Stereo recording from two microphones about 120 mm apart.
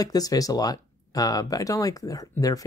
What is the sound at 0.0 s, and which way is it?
Speech, 30° left (ahead or behind).